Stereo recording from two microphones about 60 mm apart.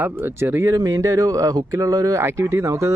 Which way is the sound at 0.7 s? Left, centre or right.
Right.